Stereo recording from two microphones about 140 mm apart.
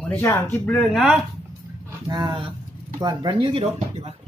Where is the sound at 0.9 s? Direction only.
5° right (ahead or behind).